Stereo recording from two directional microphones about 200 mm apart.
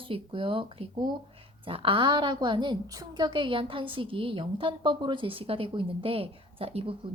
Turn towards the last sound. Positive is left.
turn(degrees=-30)  # may be behind; listen again after turning